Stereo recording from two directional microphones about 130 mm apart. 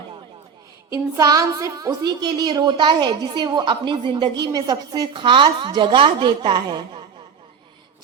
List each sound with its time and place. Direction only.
1.1 s a woman's voice: 25° right (ahead or behind)